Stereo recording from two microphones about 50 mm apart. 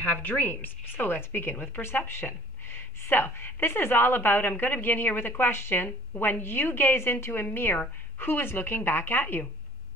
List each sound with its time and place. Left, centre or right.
0.0 s speech: left
5.8 s speech: left